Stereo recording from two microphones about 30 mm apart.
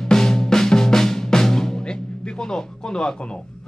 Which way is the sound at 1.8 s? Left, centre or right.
Left.